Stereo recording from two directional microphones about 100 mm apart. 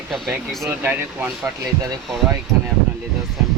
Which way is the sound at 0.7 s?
15° right (ahead or behind).